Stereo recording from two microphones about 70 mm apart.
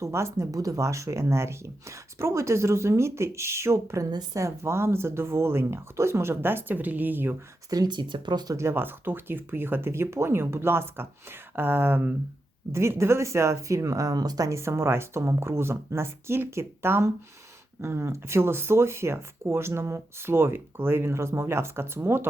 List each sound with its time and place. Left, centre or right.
0.0 s speech: right
0.5 s speech: right
7.7 s speech: right
8.5 s speech: right
12.7 s speech: right